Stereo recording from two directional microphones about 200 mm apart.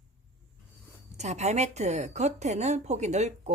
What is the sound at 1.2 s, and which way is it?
Speech, 35° right (ahead or behind).